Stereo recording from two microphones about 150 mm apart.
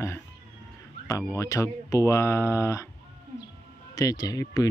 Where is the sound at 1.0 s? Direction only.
20° left (ahead or behind).